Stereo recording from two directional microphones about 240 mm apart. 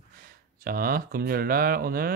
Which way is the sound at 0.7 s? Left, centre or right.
Right.